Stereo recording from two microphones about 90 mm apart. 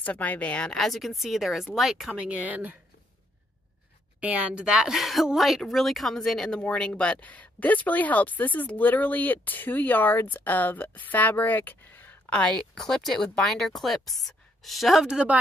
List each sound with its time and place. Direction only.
0.0 s a woman's voice: 15° left (ahead or behind)
0.7 s speech: centre (ahead or behind)
2.1 s speech: 15° right (ahead or behind)
4.2 s a woman's voice: 15° right (ahead or behind)